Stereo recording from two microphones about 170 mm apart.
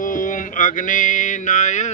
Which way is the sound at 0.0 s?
50° left (ahead or behind).